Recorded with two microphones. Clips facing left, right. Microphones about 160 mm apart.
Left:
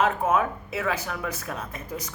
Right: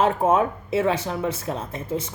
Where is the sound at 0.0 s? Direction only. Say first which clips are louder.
Right 4 dB; 30° right (ahead or behind).